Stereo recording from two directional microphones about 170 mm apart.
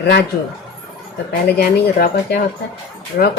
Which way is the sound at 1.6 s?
65° left (ahead or behind).